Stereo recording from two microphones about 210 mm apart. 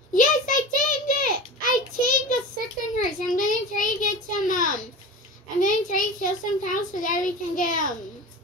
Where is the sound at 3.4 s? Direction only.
40° left (ahead or behind).